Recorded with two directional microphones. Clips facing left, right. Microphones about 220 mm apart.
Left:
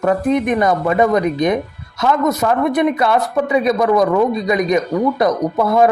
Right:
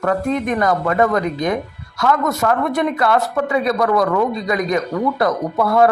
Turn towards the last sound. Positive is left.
turn(degrees=20)  # may be behind; listen again after turning